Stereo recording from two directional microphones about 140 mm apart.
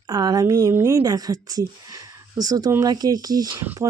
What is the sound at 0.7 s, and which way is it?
Speech, 15° right (ahead or behind).